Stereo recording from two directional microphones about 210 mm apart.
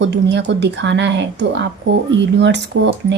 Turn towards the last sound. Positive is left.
turn(degrees=-55)  # may be behind; listen again after turning